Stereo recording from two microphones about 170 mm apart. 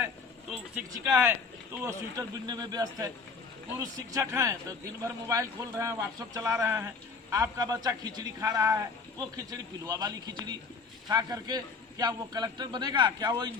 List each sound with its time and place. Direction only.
0.5 s speech: 5° right (ahead or behind); by 13.5 s 25° right (ahead or behind)